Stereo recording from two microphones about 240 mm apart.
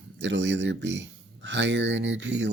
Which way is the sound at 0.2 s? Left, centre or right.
Right.